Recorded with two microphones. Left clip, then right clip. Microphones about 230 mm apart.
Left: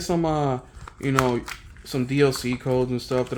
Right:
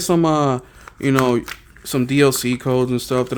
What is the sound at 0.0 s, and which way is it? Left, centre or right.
Speech, right.